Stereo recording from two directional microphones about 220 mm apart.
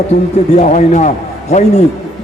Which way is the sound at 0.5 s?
35° left (ahead or behind).